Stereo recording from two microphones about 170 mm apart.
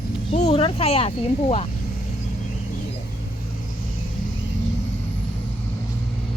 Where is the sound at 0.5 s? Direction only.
35° left (ahead or behind).